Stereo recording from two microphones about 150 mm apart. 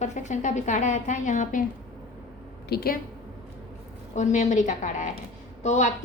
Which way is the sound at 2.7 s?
90° left.